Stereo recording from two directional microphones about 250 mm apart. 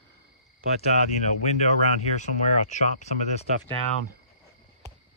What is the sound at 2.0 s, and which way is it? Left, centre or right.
Speech, left.